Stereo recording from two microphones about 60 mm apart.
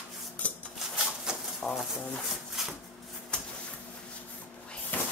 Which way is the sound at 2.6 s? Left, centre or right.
Centre.